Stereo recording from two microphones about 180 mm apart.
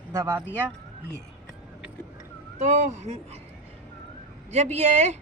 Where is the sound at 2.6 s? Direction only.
40° right (ahead or behind).